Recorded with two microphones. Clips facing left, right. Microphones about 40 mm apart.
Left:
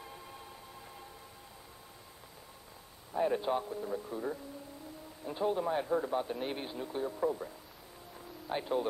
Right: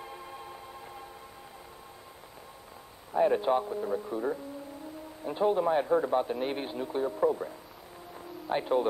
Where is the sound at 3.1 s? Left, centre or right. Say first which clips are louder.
Right 6 dB; centre.